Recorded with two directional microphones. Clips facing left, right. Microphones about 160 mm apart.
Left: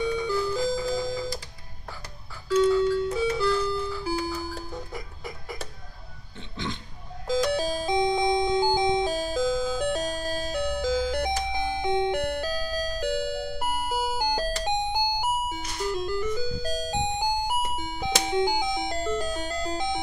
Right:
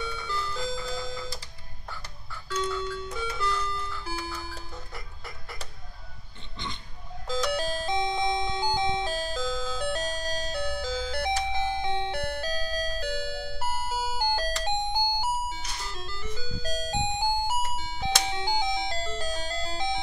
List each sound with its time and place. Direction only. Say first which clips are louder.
0.0 s music: left 9 dB; 15° left (ahead or behind)
0.9 s music: left 6 dB; 40° left (ahead or behind)
2.5 s doorbell: left 10 dB; 10° left (ahead or behind)
3.1 s music: left 9 dB; 5° left (ahead or behind)
3.5 s clock: left 7 dB; 5° left (ahead or behind)
7.2 s music: left 4 dB; 40° left (ahead or behind)
7.8 s music: left 6 dB; 15° left (ahead or behind)